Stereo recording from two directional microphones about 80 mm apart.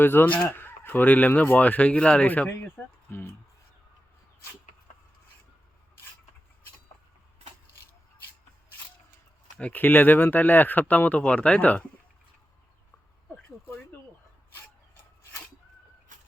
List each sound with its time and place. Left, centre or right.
0.0 s speech: left
9.6 s speech: centre